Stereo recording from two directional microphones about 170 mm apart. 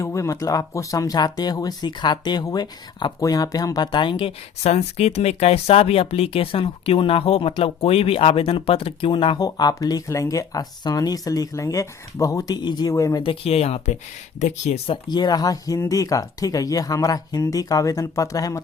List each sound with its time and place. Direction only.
0.0 s speech: 15° left (ahead or behind)
13.2 s speech: 35° left (ahead or behind)
15.1 s speech: 25° left (ahead or behind)